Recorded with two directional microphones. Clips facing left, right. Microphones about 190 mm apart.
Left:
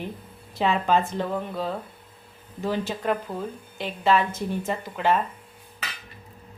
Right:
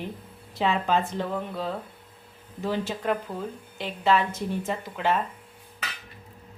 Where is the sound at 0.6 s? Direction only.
50° left (ahead or behind).